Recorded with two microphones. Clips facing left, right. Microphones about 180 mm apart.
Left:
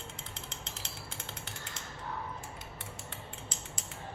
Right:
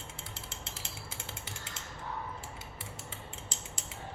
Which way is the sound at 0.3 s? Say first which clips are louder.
Even; 5° right (ahead or behind).